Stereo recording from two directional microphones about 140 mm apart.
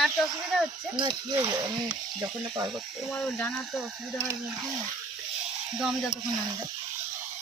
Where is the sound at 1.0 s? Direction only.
30° right (ahead or behind).